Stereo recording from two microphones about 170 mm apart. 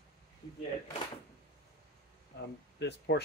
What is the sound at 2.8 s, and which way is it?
Speech, 80° left.